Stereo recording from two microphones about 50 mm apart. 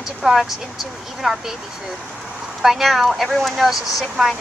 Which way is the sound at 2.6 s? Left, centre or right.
Centre.